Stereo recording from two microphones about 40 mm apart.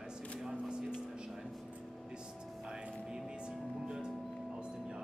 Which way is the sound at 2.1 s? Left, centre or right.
Right.